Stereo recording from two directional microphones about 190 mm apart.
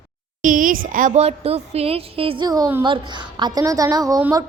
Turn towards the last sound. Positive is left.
turn(degrees=-20)  # may be behind; listen again after turning